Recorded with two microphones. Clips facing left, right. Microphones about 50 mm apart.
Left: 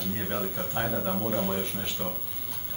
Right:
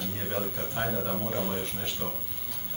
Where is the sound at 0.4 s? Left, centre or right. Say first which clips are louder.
Left 1 dB; centre.